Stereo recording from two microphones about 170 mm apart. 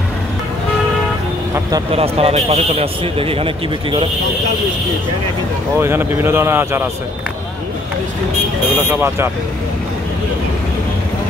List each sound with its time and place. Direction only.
1.9 s a man's voice: 35° right (ahead or behind)
5.8 s speech: 15° right (ahead or behind)
8.8 s speech: 15° right (ahead or behind)